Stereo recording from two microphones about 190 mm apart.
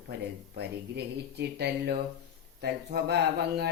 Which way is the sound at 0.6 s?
60° right (ahead or behind).